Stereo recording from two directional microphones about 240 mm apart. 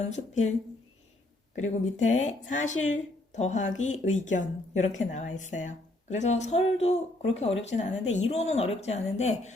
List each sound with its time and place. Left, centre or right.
0.1 s speech: left
2.0 s speech: left